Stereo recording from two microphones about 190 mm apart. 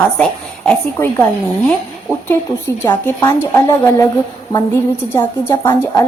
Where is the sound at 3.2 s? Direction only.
20° left (ahead or behind).